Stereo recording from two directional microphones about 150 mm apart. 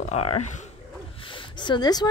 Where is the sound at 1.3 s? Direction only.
30° left (ahead or behind).